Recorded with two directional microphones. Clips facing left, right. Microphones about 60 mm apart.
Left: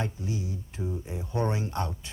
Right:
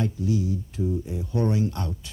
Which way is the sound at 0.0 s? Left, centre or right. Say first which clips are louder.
Right 7 dB; left.